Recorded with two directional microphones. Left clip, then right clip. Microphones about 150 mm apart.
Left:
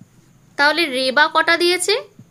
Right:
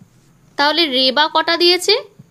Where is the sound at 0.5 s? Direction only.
25° right (ahead or behind).